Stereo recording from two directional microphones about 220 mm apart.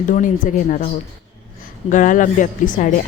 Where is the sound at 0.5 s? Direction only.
35° left (ahead or behind).